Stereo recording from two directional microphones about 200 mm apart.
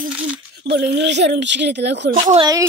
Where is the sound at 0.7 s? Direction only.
55° right (ahead or behind).